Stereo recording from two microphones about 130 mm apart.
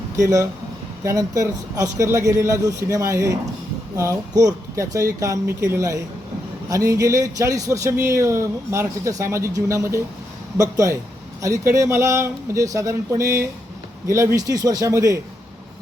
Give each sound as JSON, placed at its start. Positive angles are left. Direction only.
{"t": 0.2, "sound": "a man's voice", "side_deg": -25}